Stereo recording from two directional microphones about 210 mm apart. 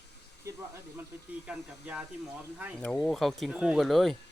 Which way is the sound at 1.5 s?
5° right (ahead or behind).